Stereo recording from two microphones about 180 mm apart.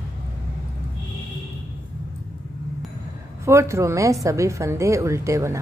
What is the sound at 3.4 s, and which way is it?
A woman's voice, 15° right (ahead or behind).